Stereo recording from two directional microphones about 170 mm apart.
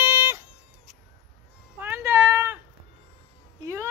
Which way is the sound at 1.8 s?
10° right (ahead or behind).